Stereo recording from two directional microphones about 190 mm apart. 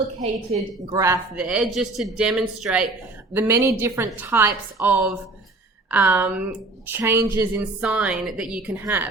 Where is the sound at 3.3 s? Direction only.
15° right (ahead or behind).